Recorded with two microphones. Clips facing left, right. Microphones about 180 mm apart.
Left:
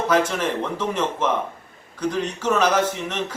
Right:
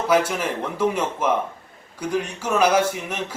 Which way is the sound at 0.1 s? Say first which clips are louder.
Right 1 dB; 10° right (ahead or behind).